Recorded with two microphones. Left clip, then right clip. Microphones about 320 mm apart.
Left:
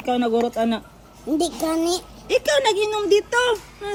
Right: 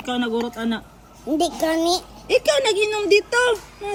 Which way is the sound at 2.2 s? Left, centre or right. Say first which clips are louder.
Even; centre.